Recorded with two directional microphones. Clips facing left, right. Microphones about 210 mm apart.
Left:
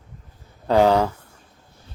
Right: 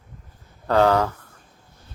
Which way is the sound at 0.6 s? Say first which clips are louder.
Left 2 dB; 15° left (ahead or behind).